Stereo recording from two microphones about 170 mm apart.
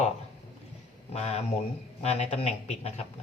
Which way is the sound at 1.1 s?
40° left (ahead or behind).